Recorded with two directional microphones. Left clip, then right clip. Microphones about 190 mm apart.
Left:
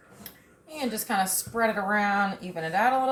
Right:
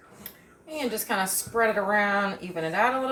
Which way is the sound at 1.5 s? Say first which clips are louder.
Right 2 dB; 35° right (ahead or behind).